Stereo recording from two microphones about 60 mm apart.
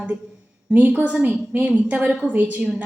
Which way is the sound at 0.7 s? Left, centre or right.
Right.